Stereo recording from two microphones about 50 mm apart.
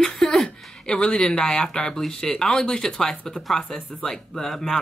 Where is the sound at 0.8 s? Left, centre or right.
Centre.